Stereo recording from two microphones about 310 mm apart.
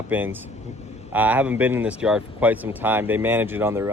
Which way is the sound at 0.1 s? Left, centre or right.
Centre.